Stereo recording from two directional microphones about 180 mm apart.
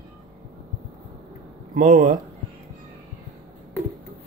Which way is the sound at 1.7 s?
45° right (ahead or behind).